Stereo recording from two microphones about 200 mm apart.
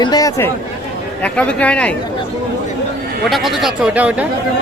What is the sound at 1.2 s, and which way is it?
Speech, 5° left (ahead or behind).